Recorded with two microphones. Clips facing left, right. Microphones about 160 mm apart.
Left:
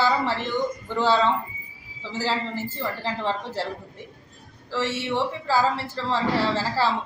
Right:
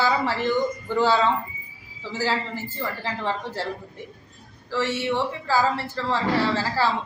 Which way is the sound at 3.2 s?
30° left (ahead or behind).